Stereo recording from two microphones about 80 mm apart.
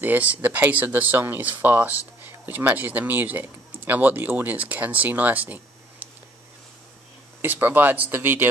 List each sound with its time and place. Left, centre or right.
0.0 s speech: right
7.4 s speech: right